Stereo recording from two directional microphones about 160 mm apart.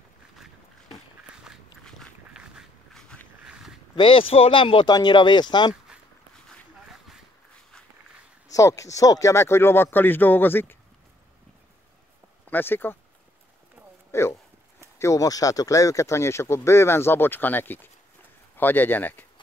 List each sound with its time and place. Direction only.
1.3 s walk: 5° right (ahead or behind)
3.4 s a sound: 5° right (ahead or behind)
3.9 s speech: 30° left (ahead or behind)
6.5 s a sound: centre (ahead or behind)
8.5 s speech: 20° left (ahead or behind)
12.4 s speech: 10° left (ahead or behind)
14.1 s speech: 15° left (ahead or behind)